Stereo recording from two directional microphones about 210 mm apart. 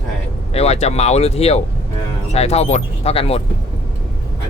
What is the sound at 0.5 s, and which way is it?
Speech, 30° left (ahead or behind).